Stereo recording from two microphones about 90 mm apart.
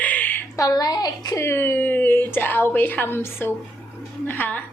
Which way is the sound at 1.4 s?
25° left (ahead or behind).